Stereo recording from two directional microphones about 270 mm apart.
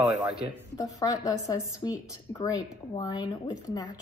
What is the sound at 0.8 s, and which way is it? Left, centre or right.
A woman's voice, centre.